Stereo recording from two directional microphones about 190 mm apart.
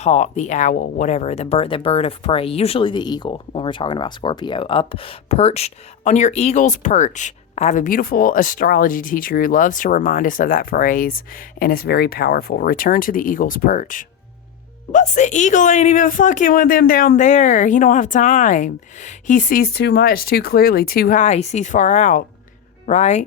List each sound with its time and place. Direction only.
0.0 s speech: 35° left (ahead or behind)